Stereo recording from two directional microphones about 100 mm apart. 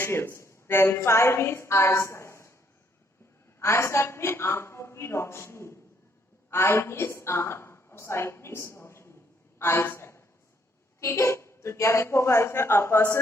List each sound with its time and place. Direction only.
0.0 s a woman's voice: 25° left (ahead or behind)
3.6 s a woman's voice: 25° left (ahead or behind)
9.6 s a sound: 25° left (ahead or behind)
11.0 s a woman's voice: 25° left (ahead or behind)